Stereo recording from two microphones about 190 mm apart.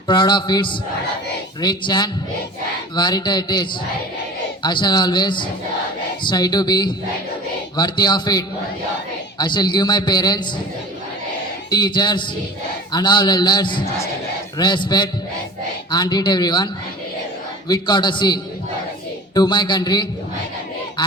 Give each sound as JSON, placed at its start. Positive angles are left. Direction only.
{"t": 0.1, "sound": "a man's voice", "side_deg": 25}
{"t": 11.7, "sound": "a man's voice", "side_deg": 20}
{"t": 17.7, "sound": "a man's voice", "side_deg": 20}